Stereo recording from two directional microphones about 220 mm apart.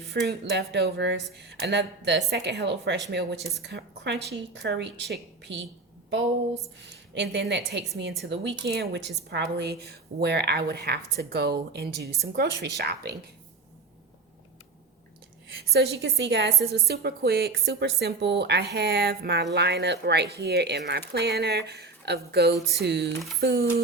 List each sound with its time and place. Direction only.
0.1 s a woman's voice: 50° right (ahead or behind)
6.7 s a woman's voice: 55° right (ahead or behind)
15.6 s a woman's voice: 45° right (ahead or behind)